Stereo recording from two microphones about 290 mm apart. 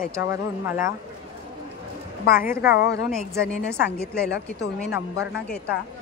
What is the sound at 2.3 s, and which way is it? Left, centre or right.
Speech, left.